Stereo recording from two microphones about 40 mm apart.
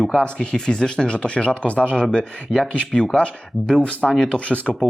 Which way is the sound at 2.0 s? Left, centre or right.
Centre.